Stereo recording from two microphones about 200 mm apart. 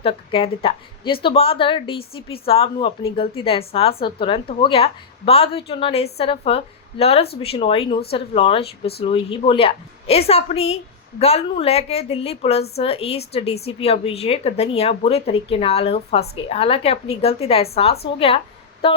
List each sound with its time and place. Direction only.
0.0 s a woman's voice: 25° left (ahead or behind)